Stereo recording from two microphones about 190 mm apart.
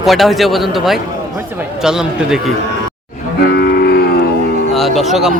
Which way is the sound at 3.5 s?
55° left (ahead or behind).